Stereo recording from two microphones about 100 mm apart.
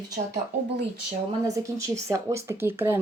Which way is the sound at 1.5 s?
35° right (ahead or behind).